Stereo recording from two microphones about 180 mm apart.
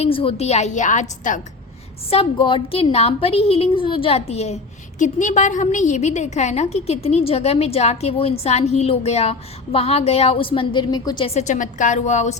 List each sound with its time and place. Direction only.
0.0 s a woman's voice: 30° left (ahead or behind)
2.0 s a woman's voice: 30° left (ahead or behind)
11.3 s a woman's voice: 45° left (ahead or behind)